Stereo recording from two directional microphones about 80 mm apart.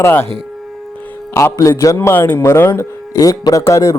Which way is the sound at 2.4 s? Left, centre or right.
Left.